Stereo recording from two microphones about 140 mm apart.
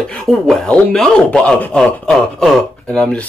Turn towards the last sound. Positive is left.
turn(degrees=10)  # may be behind; listen again after turning